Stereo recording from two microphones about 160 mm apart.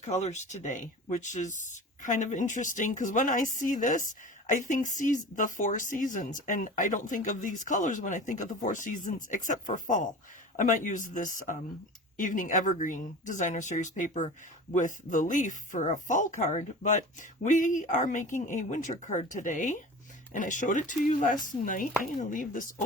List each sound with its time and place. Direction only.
0.2 s speech: 45° left (ahead or behind)